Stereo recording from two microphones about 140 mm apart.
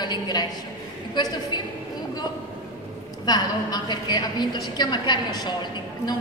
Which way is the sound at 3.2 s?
30° left (ahead or behind).